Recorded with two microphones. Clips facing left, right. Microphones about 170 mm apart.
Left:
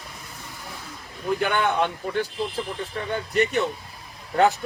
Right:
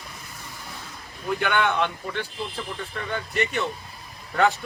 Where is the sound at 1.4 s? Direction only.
40° left (ahead or behind).